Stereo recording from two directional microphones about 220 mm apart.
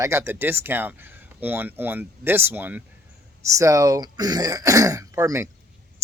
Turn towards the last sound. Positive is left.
turn(degrees=-10)  # may be behind; listen again after turning